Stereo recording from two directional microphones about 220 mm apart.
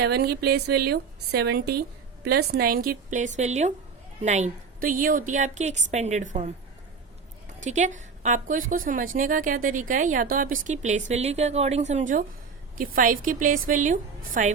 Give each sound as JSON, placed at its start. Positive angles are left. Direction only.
{"t": 0.0, "sound": "a woman's voice", "side_deg": -45}
{"t": 7.6, "sound": "a woman's voice", "side_deg": -35}